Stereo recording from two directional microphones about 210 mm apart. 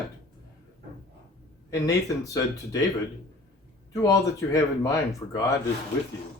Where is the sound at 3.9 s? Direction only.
15° left (ahead or behind).